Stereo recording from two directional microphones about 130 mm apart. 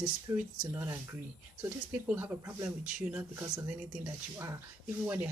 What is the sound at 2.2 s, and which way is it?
Speech, 15° right (ahead or behind).